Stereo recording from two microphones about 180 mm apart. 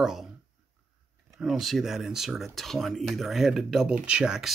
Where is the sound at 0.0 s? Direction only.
Centre (ahead or behind).